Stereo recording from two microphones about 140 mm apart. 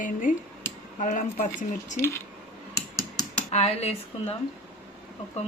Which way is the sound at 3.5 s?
50° left (ahead or behind).